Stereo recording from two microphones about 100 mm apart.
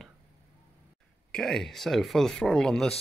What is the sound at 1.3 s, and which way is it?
Speech, 5° left (ahead or behind).